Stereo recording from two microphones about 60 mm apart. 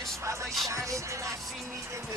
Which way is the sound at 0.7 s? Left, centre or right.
Right.